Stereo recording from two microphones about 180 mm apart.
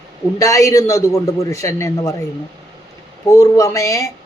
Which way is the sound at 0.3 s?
20° left (ahead or behind).